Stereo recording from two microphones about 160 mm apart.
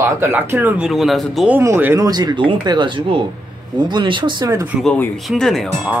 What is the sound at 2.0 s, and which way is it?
Speech, 25° right (ahead or behind).